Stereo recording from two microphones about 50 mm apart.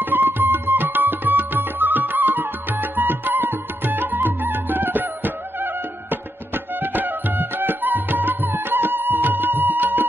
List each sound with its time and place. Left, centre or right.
0.0 s music: right